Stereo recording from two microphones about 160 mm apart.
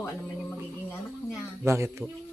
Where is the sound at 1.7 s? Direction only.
15° right (ahead or behind).